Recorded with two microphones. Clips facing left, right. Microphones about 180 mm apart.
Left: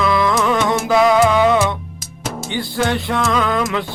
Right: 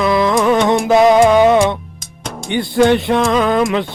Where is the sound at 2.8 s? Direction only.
20° right (ahead or behind).